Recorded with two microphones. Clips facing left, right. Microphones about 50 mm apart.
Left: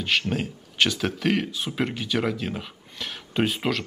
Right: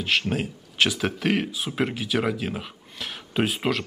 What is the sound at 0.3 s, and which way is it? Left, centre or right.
Speech, centre.